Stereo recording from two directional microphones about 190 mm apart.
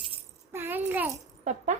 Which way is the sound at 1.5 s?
40° right (ahead or behind).